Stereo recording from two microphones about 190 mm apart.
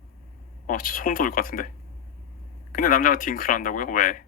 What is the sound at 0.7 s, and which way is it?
Speech, 45° left (ahead or behind).